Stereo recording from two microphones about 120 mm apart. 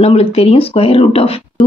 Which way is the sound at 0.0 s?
60° left (ahead or behind).